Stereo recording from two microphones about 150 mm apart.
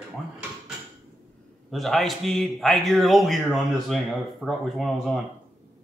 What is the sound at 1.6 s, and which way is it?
A man's voice, centre (ahead or behind).